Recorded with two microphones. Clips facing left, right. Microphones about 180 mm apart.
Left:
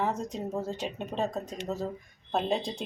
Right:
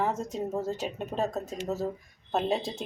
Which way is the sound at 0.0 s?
5° right (ahead or behind).